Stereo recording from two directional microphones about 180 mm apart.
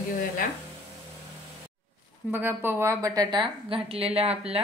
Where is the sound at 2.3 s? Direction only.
10° right (ahead or behind).